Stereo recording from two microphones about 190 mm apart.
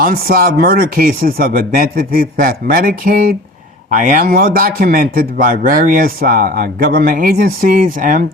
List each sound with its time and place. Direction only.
0.0 s a man's voice: 50° right (ahead or behind)